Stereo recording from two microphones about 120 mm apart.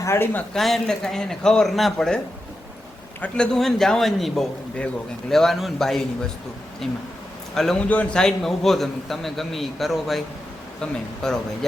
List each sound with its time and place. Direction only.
0.0 s speech: 20° left (ahead or behind)
0.5 s a man's voice: centre (ahead or behind)